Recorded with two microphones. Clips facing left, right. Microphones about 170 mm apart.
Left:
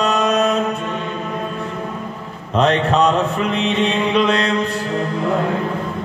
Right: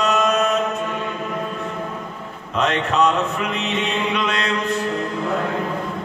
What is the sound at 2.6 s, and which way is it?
Music, 30° left (ahead or behind).